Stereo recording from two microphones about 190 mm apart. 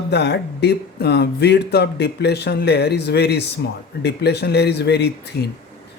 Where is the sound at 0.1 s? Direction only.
60° left (ahead or behind).